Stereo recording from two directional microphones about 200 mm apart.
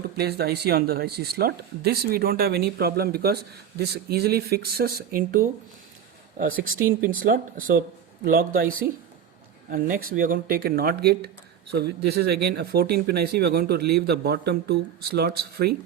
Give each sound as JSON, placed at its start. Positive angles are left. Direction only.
{"t": 0.2, "sound": "speech", "side_deg": -55}